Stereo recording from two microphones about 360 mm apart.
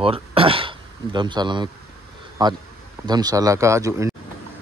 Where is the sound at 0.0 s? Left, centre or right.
Centre.